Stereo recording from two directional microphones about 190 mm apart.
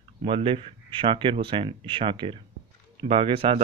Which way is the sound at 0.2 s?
30° right (ahead or behind).